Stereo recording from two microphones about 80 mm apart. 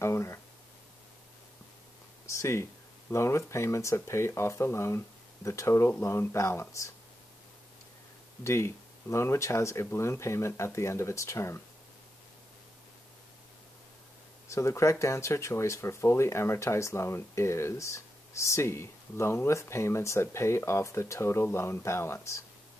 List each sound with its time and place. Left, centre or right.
0.0 s speech: left
2.2 s speech: left
8.5 s speech: left
14.5 s speech: left